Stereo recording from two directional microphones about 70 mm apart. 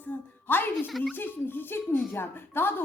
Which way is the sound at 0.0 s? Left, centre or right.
Left.